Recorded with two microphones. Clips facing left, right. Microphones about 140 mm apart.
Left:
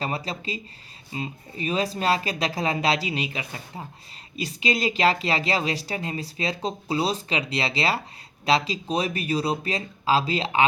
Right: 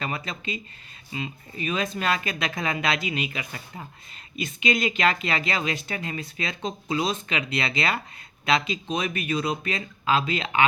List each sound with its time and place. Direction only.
0.0 s speech: 35° left (ahead or behind)